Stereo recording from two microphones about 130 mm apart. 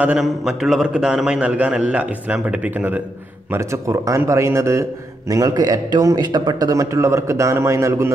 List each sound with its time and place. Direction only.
0.0 s a man's voice: 5° right (ahead or behind)
3.5 s a man's voice: 20° right (ahead or behind)